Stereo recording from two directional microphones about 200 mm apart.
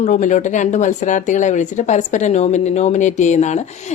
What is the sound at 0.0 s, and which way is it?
A woman's voice, 40° left (ahead or behind).